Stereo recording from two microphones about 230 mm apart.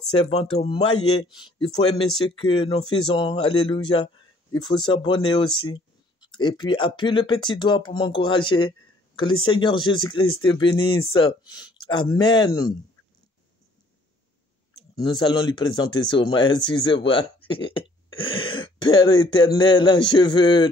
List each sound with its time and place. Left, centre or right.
0.1 s speech: left
14.8 s speech: centre